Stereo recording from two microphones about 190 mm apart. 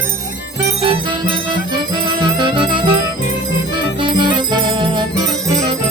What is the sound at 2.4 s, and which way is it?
Music, 25° right (ahead or behind).